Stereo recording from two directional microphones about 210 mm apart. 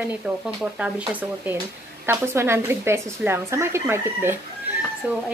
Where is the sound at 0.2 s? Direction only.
5° right (ahead or behind).